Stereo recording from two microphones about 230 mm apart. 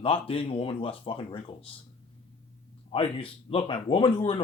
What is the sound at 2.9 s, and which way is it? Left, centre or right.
Speech, left.